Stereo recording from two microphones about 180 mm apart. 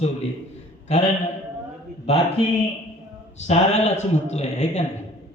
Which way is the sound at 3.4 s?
40° left (ahead or behind).